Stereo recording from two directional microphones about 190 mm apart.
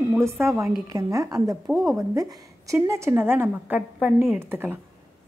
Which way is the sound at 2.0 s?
20° right (ahead or behind).